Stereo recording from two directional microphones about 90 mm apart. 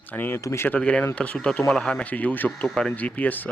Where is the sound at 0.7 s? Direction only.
15° left (ahead or behind).